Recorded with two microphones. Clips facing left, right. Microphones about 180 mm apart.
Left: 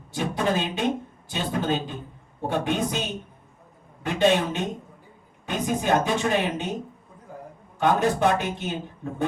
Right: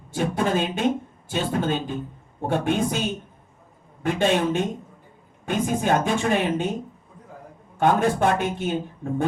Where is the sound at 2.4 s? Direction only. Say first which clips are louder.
Right 2 dB; 50° right (ahead or behind).